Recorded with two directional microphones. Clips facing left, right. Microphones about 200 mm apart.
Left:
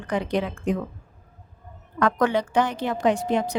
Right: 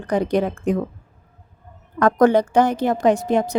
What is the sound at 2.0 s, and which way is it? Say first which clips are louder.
A woman's voice: right 7 dB; 45° right (ahead or behind).